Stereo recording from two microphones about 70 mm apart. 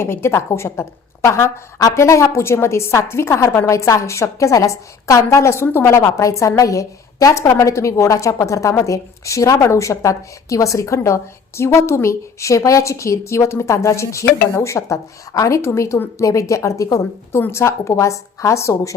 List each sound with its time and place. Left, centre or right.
0.0 s a woman's voice: left